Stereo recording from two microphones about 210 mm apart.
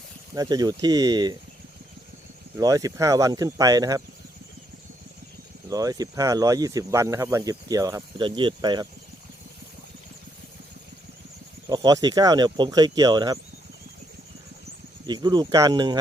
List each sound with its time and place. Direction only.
0.3 s speech: 20° right (ahead or behind)
2.6 s speech: 15° right (ahead or behind)
5.6 s speech: 15° right (ahead or behind)
11.7 s speech: 20° right (ahead or behind)
15.0 s speech: 20° right (ahead or behind)